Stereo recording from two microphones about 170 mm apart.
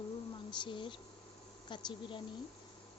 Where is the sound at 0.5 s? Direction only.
30° left (ahead or behind).